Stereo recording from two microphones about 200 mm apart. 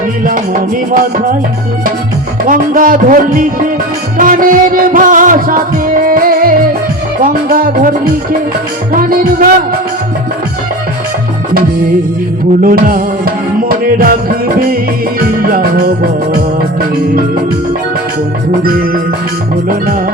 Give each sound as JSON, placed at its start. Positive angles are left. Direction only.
{"t": 2.5, "sound": "music", "side_deg": -45}
{"t": 12.6, "sound": "music", "side_deg": -45}